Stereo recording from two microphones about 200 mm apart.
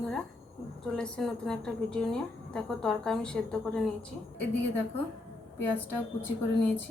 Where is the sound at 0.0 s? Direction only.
5° left (ahead or behind).